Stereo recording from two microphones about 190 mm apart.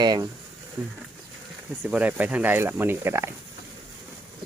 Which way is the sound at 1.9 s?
10° right (ahead or behind).